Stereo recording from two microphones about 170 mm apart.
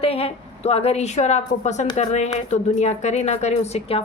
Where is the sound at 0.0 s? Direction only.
35° left (ahead or behind).